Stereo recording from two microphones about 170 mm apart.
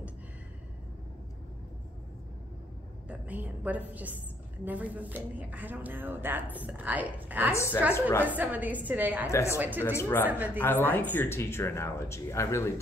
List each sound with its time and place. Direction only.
3.1 s a woman's voice: 10° right (ahead or behind)
7.5 s speech: 15° left (ahead or behind)
8.3 s a woman's voice: 10° right (ahead or behind)
9.3 s speech: 15° left (ahead or behind)
9.6 s a woman's voice: 10° right (ahead or behind)
9.8 s speech: 15° left (ahead or behind)
10.2 s a woman's voice: 10° right (ahead or behind)
10.6 s speech: 10° left (ahead or behind)